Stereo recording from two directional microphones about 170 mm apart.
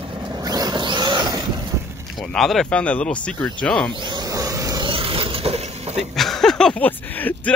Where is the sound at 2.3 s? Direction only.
Centre (ahead or behind).